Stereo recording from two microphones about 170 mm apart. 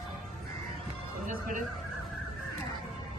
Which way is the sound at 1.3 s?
55° right (ahead or behind).